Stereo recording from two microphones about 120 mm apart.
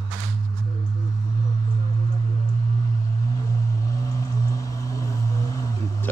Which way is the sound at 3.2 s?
25° left (ahead or behind).